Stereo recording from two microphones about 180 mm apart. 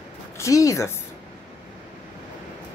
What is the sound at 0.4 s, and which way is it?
Speech, 20° left (ahead or behind).